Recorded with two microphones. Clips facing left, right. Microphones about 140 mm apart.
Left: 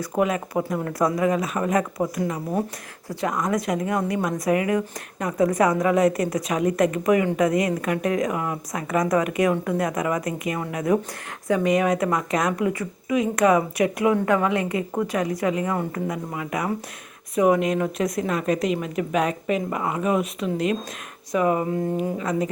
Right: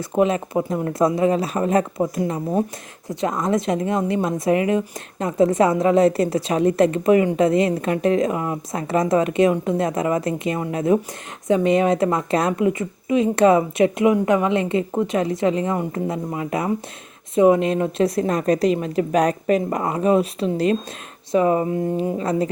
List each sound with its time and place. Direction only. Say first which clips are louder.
0.0 s a woman's voice: right 4 dB; 25° right (ahead or behind)